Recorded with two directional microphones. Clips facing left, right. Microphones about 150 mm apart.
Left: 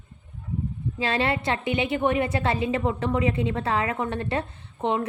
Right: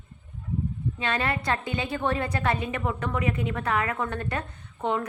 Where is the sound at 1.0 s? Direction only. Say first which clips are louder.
Left 4 dB; 30° left (ahead or behind).